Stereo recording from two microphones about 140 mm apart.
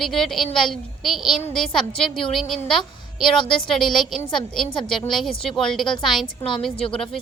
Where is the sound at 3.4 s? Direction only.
35° left (ahead or behind).